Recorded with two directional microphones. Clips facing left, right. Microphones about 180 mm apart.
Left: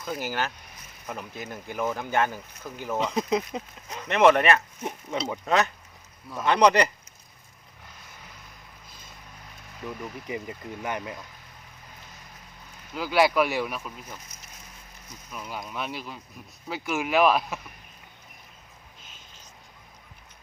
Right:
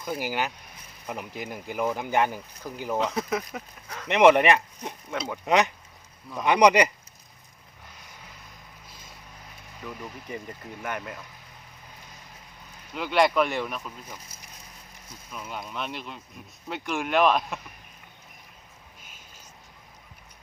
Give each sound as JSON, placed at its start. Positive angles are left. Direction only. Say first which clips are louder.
{"t": 0.0, "sound": "speech", "louder": "right 1 dB", "side_deg": -10}
{"t": 3.0, "sound": "speech", "louder": "left 4 dB", "side_deg": 15}
{"t": 4.1, "sound": "speech", "louder": "right 1 dB", "side_deg": -15}
{"t": 4.8, "sound": "speech", "louder": "left 2 dB", "side_deg": 15}
{"t": 5.5, "sound": "speech", "louder": "right 2 dB", "side_deg": -15}
{"t": 9.8, "sound": "speech", "louder": "left 3 dB", "side_deg": 10}
{"t": 12.9, "sound": "speech", "louder": "even", "side_deg": 5}
{"t": 14.1, "sound": "a sound", "louder": "even", "side_deg": -10}
{"t": 15.3, "sound": "speech", "louder": "even", "side_deg": 5}